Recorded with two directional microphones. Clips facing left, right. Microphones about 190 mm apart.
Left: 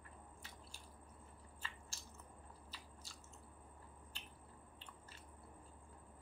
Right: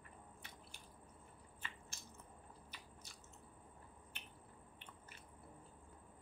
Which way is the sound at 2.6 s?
20° right (ahead or behind).